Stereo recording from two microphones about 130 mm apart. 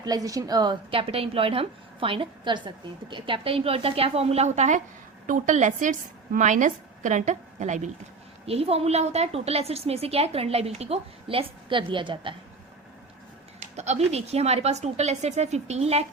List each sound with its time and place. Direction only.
0.0 s a woman's voice: 30° right (ahead or behind)
0.9 s a woman's voice: 45° right (ahead or behind); by 4.8 s 65° right (ahead or behind)
5.2 s a woman's voice: 80° right; by 7.9 s 65° right (ahead or behind)
8.4 s a woman's voice: 50° right (ahead or behind)
13.7 s a woman's voice: 60° right (ahead or behind)